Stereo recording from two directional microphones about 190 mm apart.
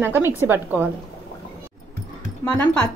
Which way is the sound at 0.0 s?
10° right (ahead or behind).